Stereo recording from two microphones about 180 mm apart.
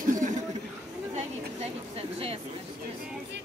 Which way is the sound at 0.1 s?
45° right (ahead or behind).